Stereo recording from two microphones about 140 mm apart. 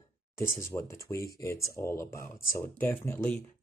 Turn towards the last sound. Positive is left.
turn(degrees=15)  # may be behind; listen again after turning